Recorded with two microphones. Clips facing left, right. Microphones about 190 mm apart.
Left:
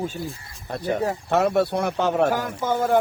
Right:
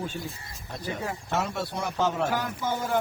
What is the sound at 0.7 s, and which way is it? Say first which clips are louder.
Speech: left 9 dB; 60° left (ahead or behind).